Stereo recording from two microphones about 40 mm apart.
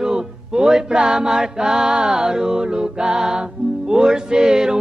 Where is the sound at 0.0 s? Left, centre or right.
Centre.